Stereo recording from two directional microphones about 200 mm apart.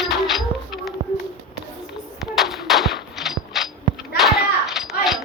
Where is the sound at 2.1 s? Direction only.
Centre (ahead or behind).